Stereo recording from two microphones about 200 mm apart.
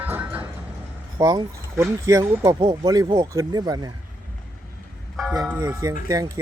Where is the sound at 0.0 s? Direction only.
10° right (ahead or behind).